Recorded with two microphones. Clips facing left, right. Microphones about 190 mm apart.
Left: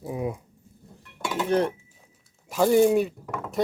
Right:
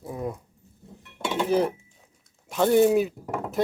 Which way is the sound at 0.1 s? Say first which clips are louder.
Left 2 dB; 10° left (ahead or behind).